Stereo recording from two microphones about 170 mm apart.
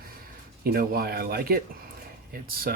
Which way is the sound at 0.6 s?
60° right (ahead or behind).